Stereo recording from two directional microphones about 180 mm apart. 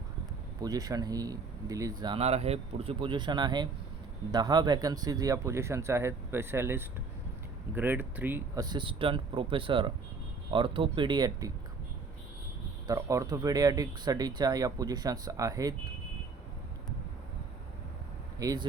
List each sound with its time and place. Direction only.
0.6 s speech: 20° right (ahead or behind)
2.1 s speech: 35° right (ahead or behind); by 8.6 s 10° right (ahead or behind)
8.6 s speech: 25° right (ahead or behind)
12.9 s speech: 20° right (ahead or behind)
18.3 s speech: 20° right (ahead or behind)